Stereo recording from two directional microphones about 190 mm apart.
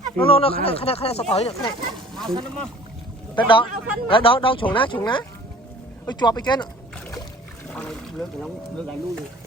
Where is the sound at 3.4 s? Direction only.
25° left (ahead or behind).